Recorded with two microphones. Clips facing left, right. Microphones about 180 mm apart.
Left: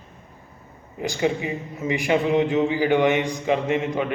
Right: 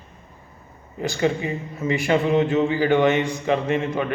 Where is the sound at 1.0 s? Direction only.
15° left (ahead or behind).